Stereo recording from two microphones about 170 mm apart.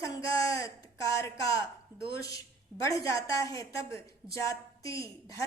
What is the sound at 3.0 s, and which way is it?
Speech, 20° left (ahead or behind).